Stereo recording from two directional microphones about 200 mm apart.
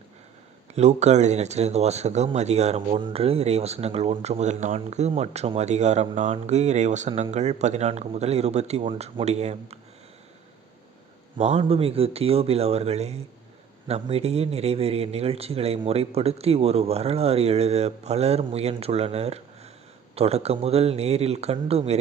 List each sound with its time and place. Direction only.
0.7 s speech: 35° right (ahead or behind)
11.3 s speech: 30° right (ahead or behind)